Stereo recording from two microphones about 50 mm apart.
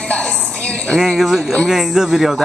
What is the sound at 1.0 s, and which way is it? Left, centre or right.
Speech, centre.